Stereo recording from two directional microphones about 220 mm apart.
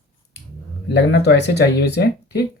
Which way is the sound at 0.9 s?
50° left (ahead or behind).